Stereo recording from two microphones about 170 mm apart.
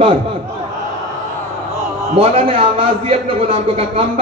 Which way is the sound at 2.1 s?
35° right (ahead or behind).